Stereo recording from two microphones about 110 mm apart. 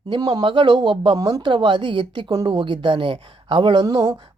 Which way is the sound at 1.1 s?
35° right (ahead or behind).